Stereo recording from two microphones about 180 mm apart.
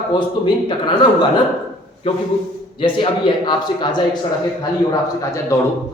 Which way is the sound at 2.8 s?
30° left (ahead or behind).